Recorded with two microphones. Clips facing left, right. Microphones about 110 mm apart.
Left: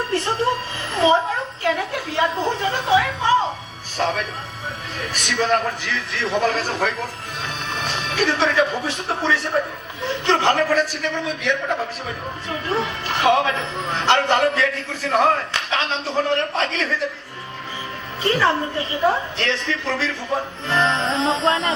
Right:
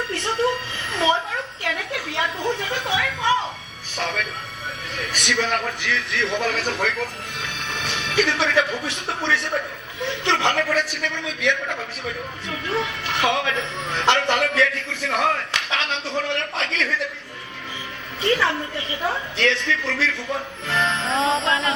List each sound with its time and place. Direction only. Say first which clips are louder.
0.1 s a woman's voice: left 1 dB; 35° left (ahead or behind)
1.6 s a sound: left 7 dB; 35° left (ahead or behind)
3.9 s a man's voice: left 4 dB; 35° left (ahead or behind)
18.2 s a man's voice: left 2 dB; 40° left (ahead or behind)